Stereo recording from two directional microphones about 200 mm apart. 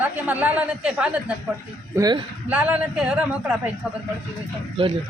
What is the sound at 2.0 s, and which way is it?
Speech, 20° right (ahead or behind).